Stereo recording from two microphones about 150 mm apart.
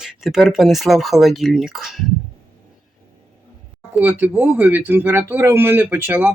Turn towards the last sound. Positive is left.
turn(degrees=-15)  # may be behind; listen again after turning